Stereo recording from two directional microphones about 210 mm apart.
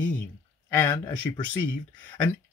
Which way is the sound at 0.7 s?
10° left (ahead or behind).